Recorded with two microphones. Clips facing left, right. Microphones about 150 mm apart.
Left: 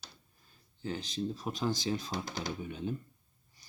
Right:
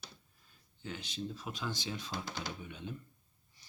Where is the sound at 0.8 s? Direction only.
35° left (ahead or behind).